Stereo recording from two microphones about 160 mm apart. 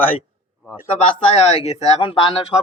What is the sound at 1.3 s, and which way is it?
Speech, 40° left (ahead or behind).